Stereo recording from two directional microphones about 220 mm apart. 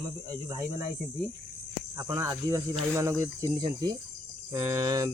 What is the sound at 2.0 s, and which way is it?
Speech, 15° right (ahead or behind).